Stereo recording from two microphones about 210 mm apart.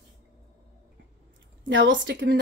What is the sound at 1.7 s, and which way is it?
Speech, 60° right (ahead or behind).